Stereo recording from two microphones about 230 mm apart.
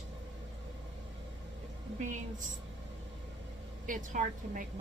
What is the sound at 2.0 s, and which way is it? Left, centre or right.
Speech, right.